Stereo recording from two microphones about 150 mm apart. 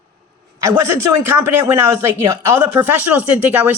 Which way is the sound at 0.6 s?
15° right (ahead or behind).